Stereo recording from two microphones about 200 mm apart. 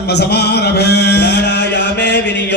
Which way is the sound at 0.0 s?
55° left (ahead or behind).